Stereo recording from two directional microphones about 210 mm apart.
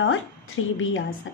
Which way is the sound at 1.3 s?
65° left (ahead or behind).